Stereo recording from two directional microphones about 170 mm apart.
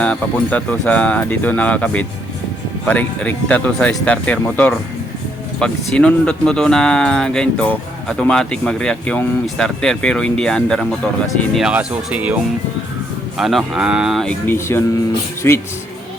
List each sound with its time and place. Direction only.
0.0 s speech: 10° left (ahead or behind); by 12.4 s 10° right (ahead or behind)
13.4 s speech: centre (ahead or behind)
14.4 s speech: 15° left (ahead or behind)